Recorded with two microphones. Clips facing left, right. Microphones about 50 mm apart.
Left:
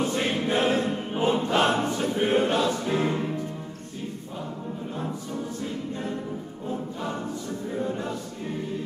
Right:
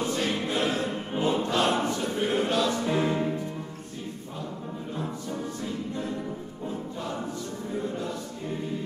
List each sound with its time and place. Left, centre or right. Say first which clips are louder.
0.1 s choir: left 3 dB; left
2.9 s music: even; centre